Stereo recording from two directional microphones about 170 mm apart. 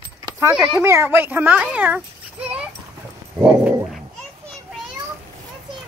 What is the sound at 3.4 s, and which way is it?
Dog, 5° right (ahead or behind).